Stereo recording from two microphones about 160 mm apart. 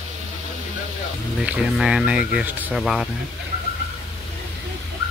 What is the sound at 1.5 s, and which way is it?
Speech, 5° right (ahead or behind).